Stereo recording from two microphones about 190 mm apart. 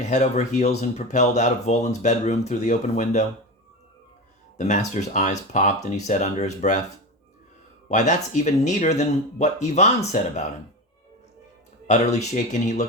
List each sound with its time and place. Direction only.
0.0 s speech: 40° left (ahead or behind)
4.5 s speech: 40° left (ahead or behind)
7.9 s speech: 40° left (ahead or behind)
11.9 s speech: 40° left (ahead or behind)